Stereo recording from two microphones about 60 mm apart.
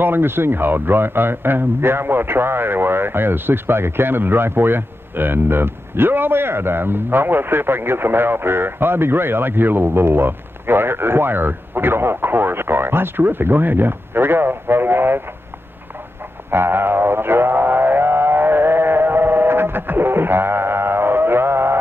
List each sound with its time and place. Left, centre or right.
0.0 s speech: right
16.4 s music: right